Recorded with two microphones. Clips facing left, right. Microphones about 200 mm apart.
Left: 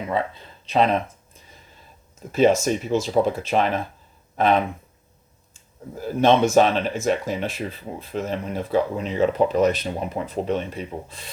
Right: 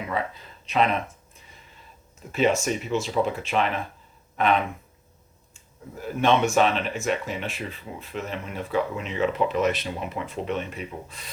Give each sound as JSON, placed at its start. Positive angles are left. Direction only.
{"t": 0.1, "sound": "speech", "side_deg": 30}
{"t": 2.3, "sound": "speech", "side_deg": 40}
{"t": 6.0, "sound": "speech", "side_deg": 35}